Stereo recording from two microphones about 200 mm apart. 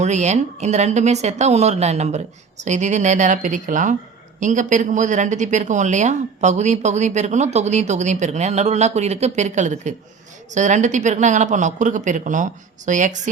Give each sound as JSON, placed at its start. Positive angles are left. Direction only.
{"t": 0.0, "sound": "speech", "side_deg": -35}